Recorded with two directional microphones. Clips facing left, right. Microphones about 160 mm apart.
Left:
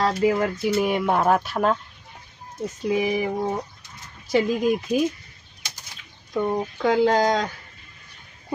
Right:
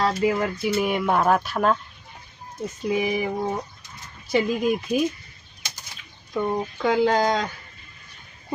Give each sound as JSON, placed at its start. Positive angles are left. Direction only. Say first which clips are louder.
{"t": 0.0, "sound": "speech", "louder": "left 1 dB", "side_deg": 45}
{"t": 2.9, "sound": "speech", "louder": "left 1 dB", "side_deg": 35}
{"t": 6.3, "sound": "speech", "louder": "left 1 dB", "side_deg": 45}